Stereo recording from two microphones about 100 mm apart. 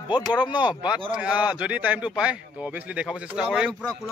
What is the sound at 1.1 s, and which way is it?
A man's voice, 10° right (ahead or behind).